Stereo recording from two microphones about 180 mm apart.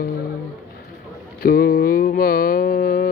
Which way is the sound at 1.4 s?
55° left (ahead or behind).